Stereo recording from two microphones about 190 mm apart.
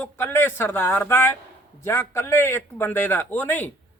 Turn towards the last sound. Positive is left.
turn(degrees=10)  # may be behind; listen again after turning